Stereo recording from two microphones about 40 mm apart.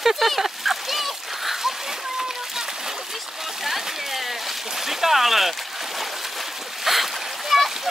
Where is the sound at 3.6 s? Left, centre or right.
Centre.